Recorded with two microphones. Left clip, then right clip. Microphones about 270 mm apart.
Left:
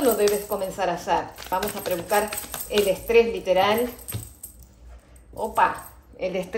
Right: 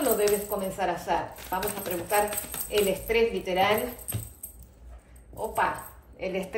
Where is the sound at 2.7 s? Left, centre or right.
Left.